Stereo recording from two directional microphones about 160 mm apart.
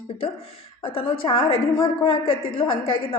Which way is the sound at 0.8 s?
35° left (ahead or behind).